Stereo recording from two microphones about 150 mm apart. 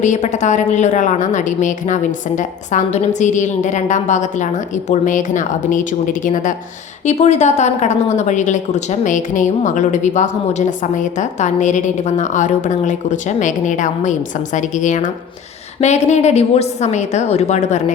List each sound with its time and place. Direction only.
0.0 s a woman's voice: 55° left (ahead or behind)